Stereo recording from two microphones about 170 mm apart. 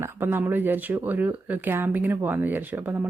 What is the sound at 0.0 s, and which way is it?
Speech, 15° right (ahead or behind).